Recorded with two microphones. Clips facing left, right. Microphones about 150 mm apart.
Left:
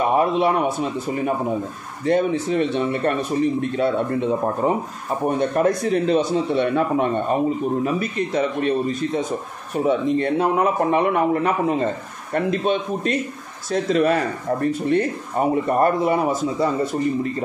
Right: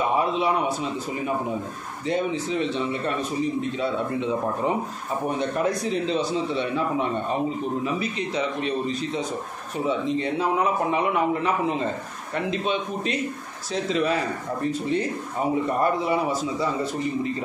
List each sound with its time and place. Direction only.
0.1 s speech: 55° left (ahead or behind)
2.0 s a man's voice: 55° left (ahead or behind)